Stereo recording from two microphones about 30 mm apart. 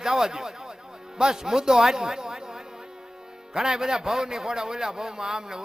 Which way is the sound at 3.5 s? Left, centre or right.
Centre.